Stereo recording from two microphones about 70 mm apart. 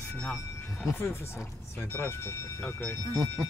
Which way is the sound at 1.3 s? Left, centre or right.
Left.